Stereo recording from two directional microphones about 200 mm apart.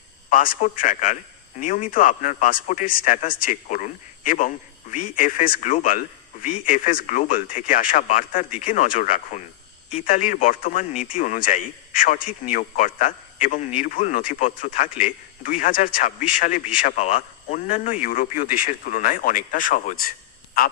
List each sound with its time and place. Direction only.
0.3 s a man's voice: 40° left (ahead or behind)